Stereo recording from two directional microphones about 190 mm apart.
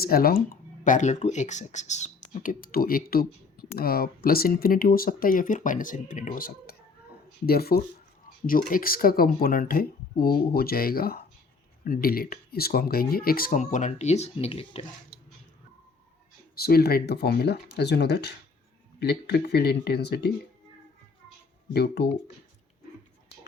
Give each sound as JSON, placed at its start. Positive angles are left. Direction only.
{"t": 0.0, "sound": "speech", "side_deg": 50}
{"t": 0.9, "sound": "speech", "side_deg": 40}
{"t": 16.6, "sound": "speech", "side_deg": 55}
{"t": 21.7, "sound": "speech", "side_deg": 60}